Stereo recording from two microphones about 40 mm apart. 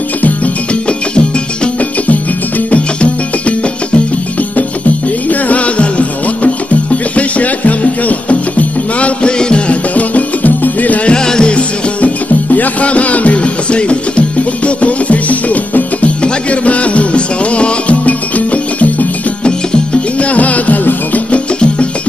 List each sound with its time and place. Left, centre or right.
2.7 s music: left
5.3 s music: left
11.1 s music: centre; by 21.4 s left